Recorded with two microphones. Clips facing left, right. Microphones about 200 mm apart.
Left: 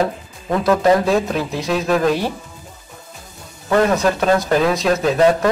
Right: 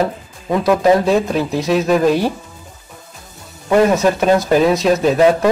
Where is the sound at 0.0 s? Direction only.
10° right (ahead or behind).